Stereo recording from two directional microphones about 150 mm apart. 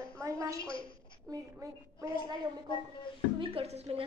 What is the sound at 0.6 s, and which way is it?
Speech, 35° left (ahead or behind).